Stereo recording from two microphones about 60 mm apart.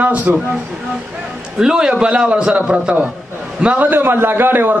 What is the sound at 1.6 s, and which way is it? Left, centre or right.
A man's voice, centre.